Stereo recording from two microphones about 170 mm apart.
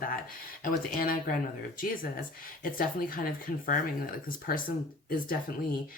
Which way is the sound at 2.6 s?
55° left (ahead or behind).